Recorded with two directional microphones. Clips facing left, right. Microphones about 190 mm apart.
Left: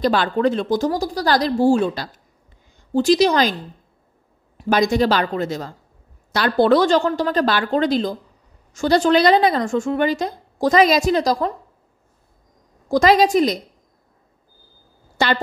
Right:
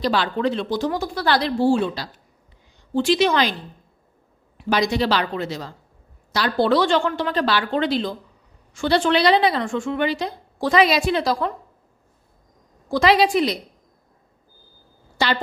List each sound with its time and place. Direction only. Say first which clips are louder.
0.0 s a woman's voice: left 3 dB; 50° left (ahead or behind)
4.6 s a woman's voice: left 4 dB; 45° left (ahead or behind)
12.8 s a woman's voice: left 3 dB; 45° left (ahead or behind)
15.1 s speech: left 3 dB; 50° left (ahead or behind)